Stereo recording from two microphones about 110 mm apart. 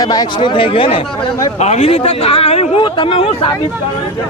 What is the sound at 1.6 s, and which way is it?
A man's voice, 75° left (ahead or behind).